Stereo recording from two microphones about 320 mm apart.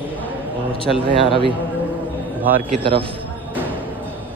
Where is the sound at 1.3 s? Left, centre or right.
Centre.